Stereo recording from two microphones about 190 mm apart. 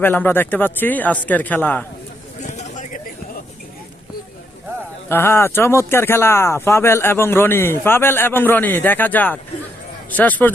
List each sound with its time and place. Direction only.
0.0 s speech: 10° left (ahead or behind)
2.4 s a sound: 40° left (ahead or behind)
5.0 s speech: 10° left (ahead or behind)